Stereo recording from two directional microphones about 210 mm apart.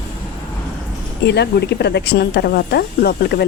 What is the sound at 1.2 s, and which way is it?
Speech, 55° left (ahead or behind).